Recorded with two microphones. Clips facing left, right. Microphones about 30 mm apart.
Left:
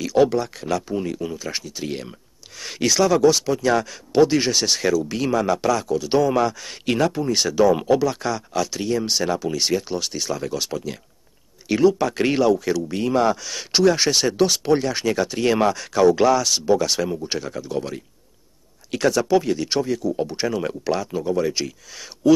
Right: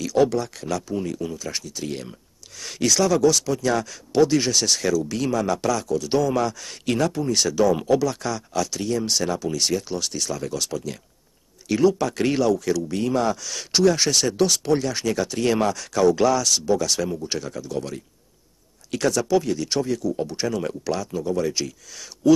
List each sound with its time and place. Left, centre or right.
0.0 s speech: centre